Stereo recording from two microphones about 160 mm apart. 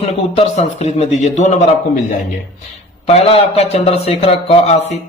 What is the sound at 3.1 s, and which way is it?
Speech, 40° left (ahead or behind).